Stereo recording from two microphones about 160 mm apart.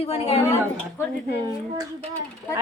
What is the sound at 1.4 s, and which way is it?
Speech, 25° right (ahead or behind).